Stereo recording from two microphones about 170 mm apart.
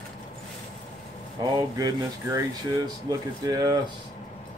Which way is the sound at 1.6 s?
20° right (ahead or behind).